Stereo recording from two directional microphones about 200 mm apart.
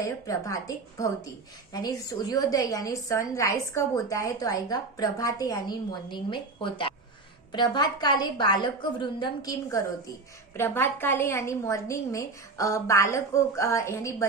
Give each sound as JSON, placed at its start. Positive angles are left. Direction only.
{"t": 0.0, "sound": "a woman's voice", "side_deg": 15}